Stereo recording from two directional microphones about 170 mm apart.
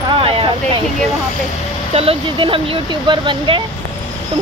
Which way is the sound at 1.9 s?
30° right (ahead or behind).